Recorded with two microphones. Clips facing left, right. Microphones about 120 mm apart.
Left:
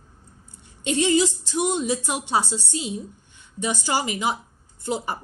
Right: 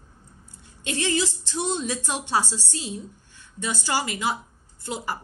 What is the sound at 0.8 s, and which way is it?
A woman's voice, 20° left (ahead or behind).